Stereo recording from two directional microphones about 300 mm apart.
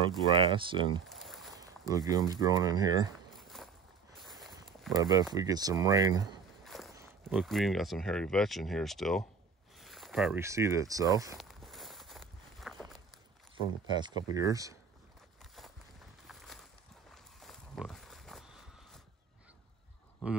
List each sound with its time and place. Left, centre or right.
0.5 s speech: centre
1.0 s a sound: centre
1.6 s speech: centre
3.3 s walk: centre
4.9 s speech: centre
6.6 s walk: centre
7.0 s speech: centre
11.3 s walk: centre
13.8 s speech: centre
16.3 s a sound: centre